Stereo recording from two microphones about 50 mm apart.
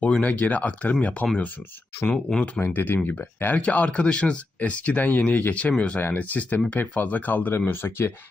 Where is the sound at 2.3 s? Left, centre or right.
Centre.